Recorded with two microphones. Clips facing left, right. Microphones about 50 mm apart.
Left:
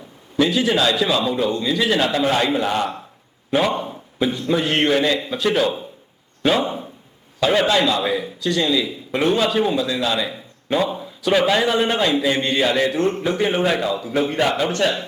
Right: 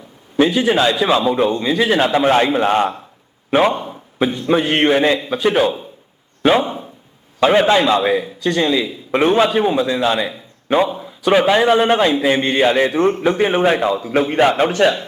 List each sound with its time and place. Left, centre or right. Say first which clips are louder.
0.3 s a man's voice: right 4 dB; right
4.2 s a man's voice: right 4 dB; right
6.6 s speech: right 2 dB; centre
7.3 s a man's voice: right 4 dB; right